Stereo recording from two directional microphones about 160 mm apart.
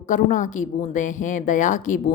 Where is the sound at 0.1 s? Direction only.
55° left (ahead or behind).